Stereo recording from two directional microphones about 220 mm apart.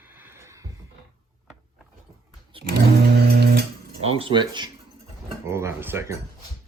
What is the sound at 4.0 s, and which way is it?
Speech, 25° right (ahead or behind).